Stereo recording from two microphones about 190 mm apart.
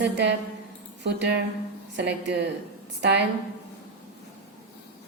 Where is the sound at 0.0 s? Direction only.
65° right (ahead or behind).